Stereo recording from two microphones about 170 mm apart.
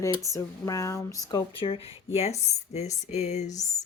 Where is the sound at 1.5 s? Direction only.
30° left (ahead or behind).